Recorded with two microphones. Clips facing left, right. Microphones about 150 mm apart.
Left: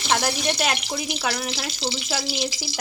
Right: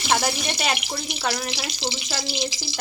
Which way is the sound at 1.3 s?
10° right (ahead or behind).